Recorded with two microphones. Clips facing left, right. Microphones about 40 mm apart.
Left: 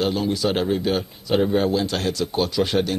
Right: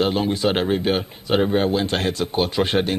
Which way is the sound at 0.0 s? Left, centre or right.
Right.